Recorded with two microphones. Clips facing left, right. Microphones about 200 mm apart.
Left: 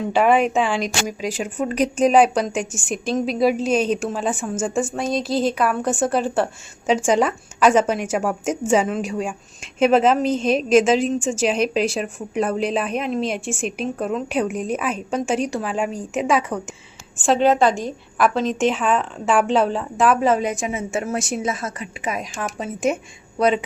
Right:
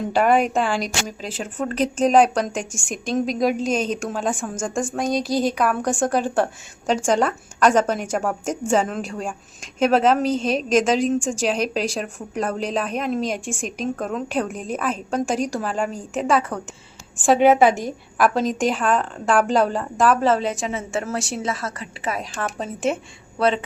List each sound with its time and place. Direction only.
0.2 s a woman's voice: 5° left (ahead or behind)
17.3 s a woman's voice: 10° right (ahead or behind); by 23.6 s 15° left (ahead or behind)